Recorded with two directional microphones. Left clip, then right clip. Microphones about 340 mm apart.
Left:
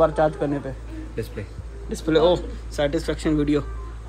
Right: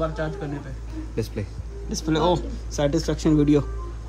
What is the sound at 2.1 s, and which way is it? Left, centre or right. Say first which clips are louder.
Speech: left 4 dB; centre.